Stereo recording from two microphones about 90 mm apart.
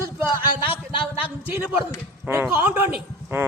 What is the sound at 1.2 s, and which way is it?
Speech, 20° right (ahead or behind).